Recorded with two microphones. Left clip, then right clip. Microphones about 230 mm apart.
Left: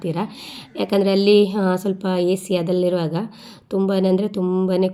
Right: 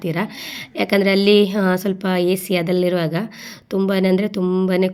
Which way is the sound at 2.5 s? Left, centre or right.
Right.